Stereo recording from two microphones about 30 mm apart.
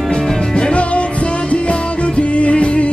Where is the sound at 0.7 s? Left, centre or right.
Left.